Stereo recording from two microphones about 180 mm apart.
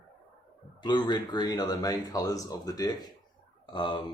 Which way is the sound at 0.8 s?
25° left (ahead or behind).